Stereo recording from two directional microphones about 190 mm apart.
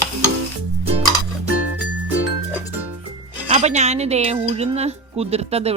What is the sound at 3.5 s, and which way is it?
Speech, 35° right (ahead or behind).